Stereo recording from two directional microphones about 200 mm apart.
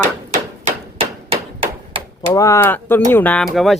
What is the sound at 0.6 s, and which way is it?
Hammer, 30° right (ahead or behind).